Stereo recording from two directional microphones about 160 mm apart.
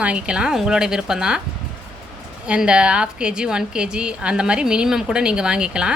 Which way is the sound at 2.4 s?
5° right (ahead or behind).